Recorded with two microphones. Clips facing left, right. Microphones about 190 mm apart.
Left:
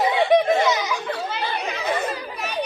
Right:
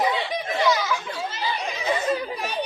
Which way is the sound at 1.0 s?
60° left (ahead or behind).